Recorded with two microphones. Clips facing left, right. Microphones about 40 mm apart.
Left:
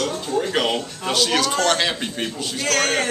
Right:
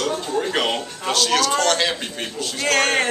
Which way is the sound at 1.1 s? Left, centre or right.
Centre.